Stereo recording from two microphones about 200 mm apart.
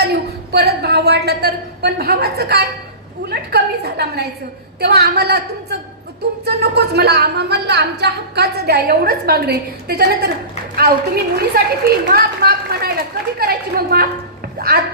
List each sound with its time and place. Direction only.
0.0 s a woman's voice: 55° right (ahead or behind)
6.4 s a woman's voice: 55° right (ahead or behind)